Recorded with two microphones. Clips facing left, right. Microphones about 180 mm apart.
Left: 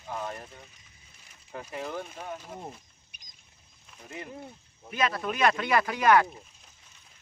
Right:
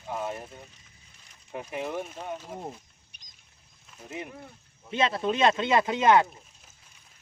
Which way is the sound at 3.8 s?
Centre (ahead or behind).